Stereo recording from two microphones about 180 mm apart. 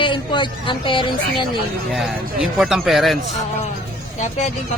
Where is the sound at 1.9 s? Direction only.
Centre (ahead or behind).